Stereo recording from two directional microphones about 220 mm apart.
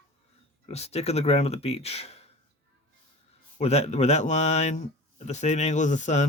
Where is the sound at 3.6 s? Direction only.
30° left (ahead or behind).